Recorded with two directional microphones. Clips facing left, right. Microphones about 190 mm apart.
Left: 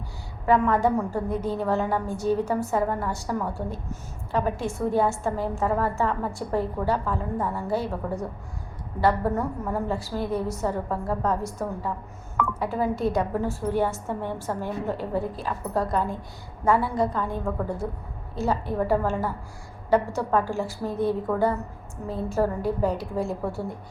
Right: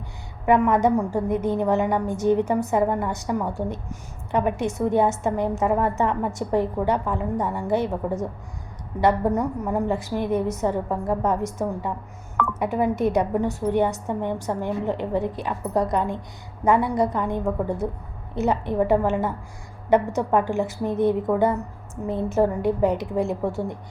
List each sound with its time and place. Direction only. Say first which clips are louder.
0.4 s a woman's voice: right 3 dB; 15° right (ahead or behind)
9.0 s a woman's voice: right 3 dB; 20° right (ahead or behind)